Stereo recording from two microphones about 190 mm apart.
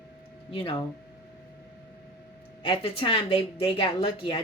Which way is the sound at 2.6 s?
30° left (ahead or behind).